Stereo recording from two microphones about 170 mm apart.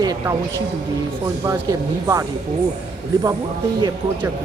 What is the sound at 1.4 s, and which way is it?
Speech, 20° right (ahead or behind).